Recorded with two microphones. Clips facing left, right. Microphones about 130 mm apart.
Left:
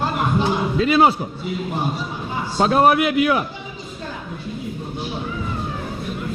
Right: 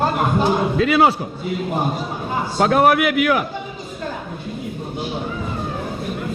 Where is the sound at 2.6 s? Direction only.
20° left (ahead or behind).